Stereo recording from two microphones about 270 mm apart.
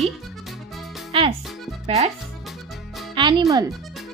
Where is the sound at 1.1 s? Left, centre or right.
Centre.